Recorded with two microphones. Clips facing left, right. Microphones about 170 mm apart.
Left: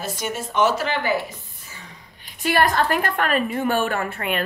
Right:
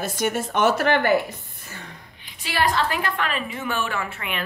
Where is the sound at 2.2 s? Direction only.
50° left (ahead or behind).